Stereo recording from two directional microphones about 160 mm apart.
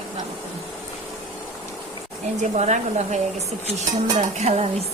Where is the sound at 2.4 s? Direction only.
45° right (ahead or behind).